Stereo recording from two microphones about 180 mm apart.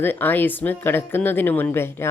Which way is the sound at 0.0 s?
10° left (ahead or behind).